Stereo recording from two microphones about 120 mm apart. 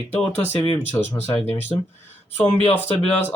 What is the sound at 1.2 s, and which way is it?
Speech, 60° left (ahead or behind).